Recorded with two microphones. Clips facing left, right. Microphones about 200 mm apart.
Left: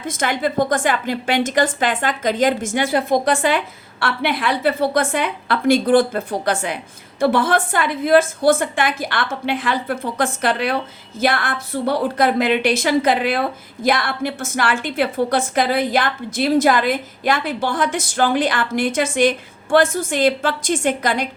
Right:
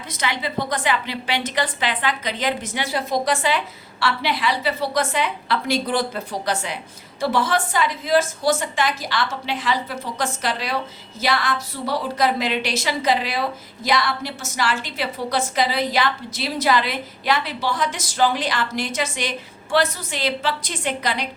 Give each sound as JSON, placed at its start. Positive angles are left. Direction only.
{"t": 0.0, "sound": "a woman's voice", "side_deg": 50}